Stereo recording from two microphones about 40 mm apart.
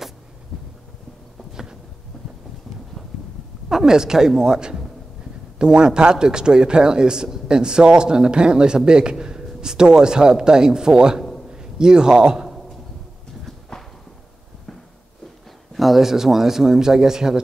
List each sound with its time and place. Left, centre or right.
1.5 s a sound: centre
3.6 s a man's voice: centre
13.5 s clip-clop: centre
15.7 s a man's voice: centre